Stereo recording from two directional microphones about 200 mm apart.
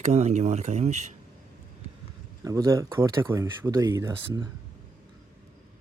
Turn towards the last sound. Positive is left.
turn(degrees=-20)  # may be behind; listen again after turning